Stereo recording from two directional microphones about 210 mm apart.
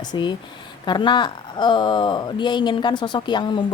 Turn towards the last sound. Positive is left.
turn(degrees=20)  # may be behind; listen again after turning